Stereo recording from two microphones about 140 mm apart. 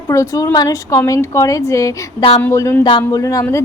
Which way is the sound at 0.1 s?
20° left (ahead or behind).